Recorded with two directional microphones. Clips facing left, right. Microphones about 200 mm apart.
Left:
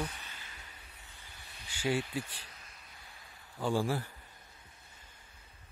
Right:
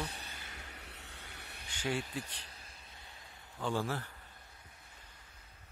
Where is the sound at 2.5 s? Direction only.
30° right (ahead or behind).